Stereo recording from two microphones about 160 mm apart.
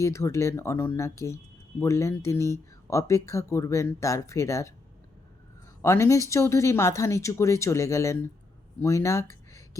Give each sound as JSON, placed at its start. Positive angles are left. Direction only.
{"t": 0.0, "sound": "speech", "side_deg": 20}
{"t": 5.8, "sound": "speech", "side_deg": 20}